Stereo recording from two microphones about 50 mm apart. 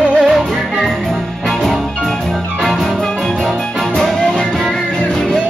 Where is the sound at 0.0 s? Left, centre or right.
Centre.